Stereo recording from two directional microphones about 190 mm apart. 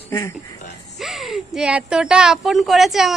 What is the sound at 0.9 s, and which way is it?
A woman's voice, centre (ahead or behind).